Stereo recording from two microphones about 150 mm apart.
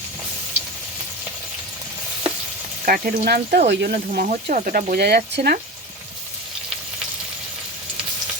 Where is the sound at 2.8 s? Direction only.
70° right (ahead or behind); by 5.5 s 90° right.